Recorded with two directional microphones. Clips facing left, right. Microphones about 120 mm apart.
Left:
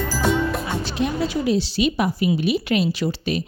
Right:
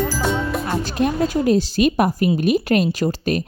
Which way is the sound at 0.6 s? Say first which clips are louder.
Right 3 dB; 50° right (ahead or behind).